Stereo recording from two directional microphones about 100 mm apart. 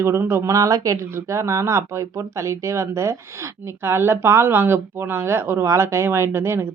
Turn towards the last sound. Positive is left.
turn(degrees=-25)  # may be behind; listen again after turning